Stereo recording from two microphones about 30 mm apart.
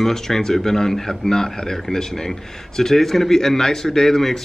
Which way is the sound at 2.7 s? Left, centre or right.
Centre.